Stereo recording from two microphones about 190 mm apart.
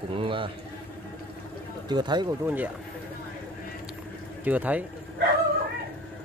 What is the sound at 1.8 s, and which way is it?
Speech, 20° right (ahead or behind).